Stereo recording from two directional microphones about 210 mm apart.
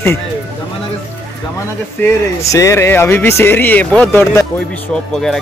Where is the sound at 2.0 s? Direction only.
15° left (ahead or behind).